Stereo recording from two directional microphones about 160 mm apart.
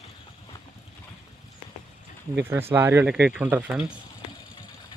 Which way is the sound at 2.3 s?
15° right (ahead or behind).